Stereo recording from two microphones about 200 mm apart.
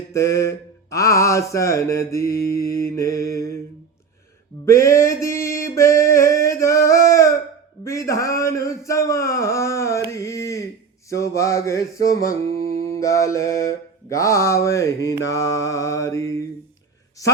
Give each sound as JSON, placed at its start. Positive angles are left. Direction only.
{"t": 0.1, "sound": "mantra", "side_deg": 15}
{"t": 4.6, "sound": "a sound", "side_deg": 15}
{"t": 7.9, "sound": "mantra", "side_deg": 15}